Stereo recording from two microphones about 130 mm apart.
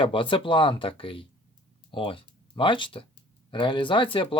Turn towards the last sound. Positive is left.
turn(degrees=40)  # may be behind; listen again after turning